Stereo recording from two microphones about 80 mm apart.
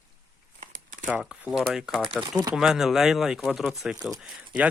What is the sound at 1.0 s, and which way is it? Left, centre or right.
Speech, centre.